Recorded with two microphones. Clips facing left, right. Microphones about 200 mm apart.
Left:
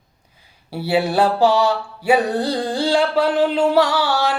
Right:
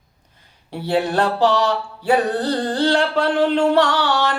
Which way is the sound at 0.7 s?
10° left (ahead or behind).